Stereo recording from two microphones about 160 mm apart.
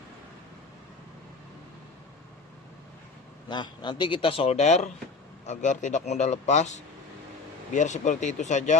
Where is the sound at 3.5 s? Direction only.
30° left (ahead or behind).